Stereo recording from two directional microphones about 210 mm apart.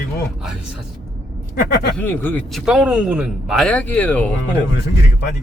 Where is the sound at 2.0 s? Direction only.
10° left (ahead or behind).